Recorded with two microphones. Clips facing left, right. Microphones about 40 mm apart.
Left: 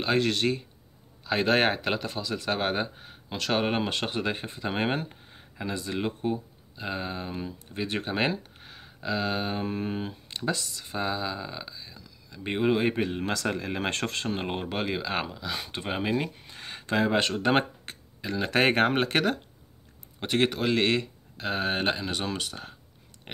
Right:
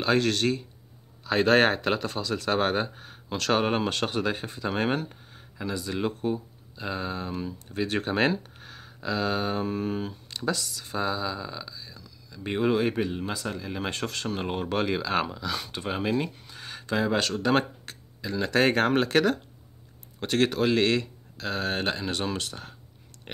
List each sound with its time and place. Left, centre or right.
0.0 s speech: centre
5.9 s speech: centre
13.2 s speech: left
13.5 s speech: left
14.1 s speech: left
16.4 s speech: left
20.2 s speech: centre
21.9 s speech: centre
23.3 s a sound: centre